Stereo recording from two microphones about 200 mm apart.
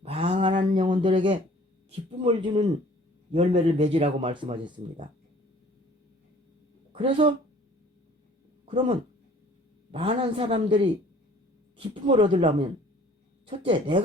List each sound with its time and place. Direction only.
0.0 s a sound: 30° right (ahead or behind)
2.2 s speech: 25° right (ahead or behind)
6.9 s speech: 25° right (ahead or behind)
8.6 s speech: 30° right (ahead or behind)